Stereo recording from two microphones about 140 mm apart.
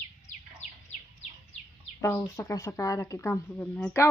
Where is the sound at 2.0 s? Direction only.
20° left (ahead or behind).